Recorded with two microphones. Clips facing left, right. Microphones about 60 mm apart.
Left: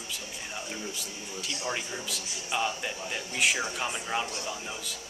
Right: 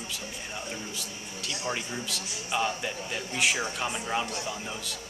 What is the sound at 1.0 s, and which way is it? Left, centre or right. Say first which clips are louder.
Speech: even; centre.